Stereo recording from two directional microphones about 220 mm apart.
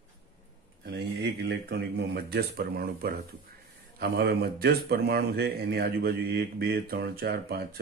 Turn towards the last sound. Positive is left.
turn(degrees=-45)  # may be behind; listen again after turning